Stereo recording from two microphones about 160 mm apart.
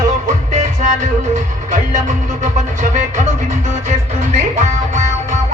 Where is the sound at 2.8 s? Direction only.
50° right (ahead or behind).